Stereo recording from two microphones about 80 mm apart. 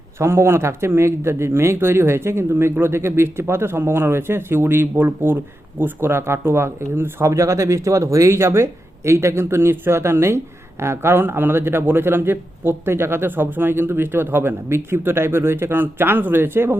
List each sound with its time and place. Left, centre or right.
0.2 s speech: right